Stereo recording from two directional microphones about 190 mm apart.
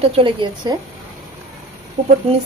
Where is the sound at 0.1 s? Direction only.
25° right (ahead or behind).